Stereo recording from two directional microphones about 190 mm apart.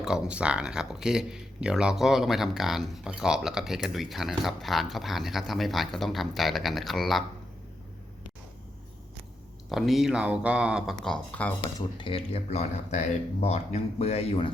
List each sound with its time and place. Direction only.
0.0 s speech: 5° right (ahead or behind)
9.6 s speech: centre (ahead or behind)
11.9 s speech: 30° left (ahead or behind)